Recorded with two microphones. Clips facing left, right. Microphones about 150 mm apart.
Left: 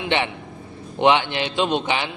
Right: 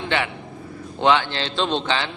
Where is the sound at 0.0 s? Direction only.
20° left (ahead or behind).